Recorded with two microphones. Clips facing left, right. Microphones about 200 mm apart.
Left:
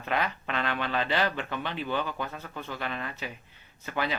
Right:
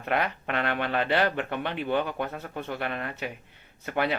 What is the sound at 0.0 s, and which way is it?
Speech, 55° right (ahead or behind).